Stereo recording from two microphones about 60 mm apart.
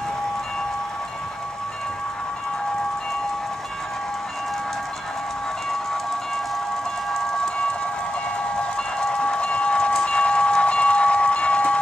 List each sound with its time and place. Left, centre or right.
7.1 s train: centre